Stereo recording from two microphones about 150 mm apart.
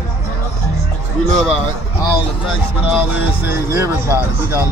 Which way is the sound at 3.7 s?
20° right (ahead or behind).